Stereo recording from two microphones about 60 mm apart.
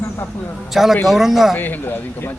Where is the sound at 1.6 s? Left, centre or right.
Left.